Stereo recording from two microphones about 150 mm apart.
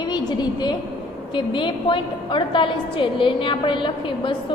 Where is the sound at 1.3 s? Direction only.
30° left (ahead or behind).